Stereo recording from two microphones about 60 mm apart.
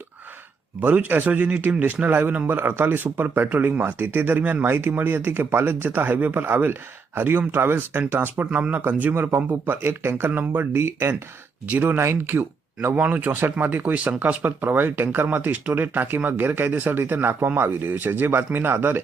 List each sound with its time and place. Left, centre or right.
0.8 s a man's voice: right
10.3 s a man's voice: right
10.6 s speech: right